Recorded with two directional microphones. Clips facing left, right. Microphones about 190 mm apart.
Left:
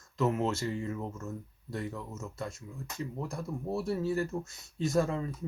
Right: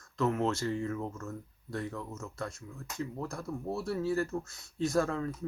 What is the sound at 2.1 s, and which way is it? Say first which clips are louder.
Speech: even; 20° left (ahead or behind).